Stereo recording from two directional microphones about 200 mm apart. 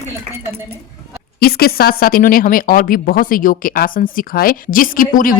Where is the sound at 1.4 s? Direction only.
50° left (ahead or behind).